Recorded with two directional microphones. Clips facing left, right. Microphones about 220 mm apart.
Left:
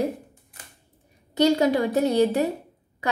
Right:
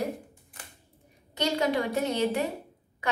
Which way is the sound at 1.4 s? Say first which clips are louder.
Left 7 dB; 35° left (ahead or behind).